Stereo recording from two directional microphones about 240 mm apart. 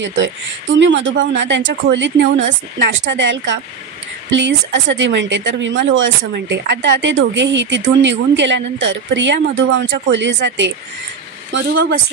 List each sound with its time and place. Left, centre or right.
0.0 s a woman's voice: right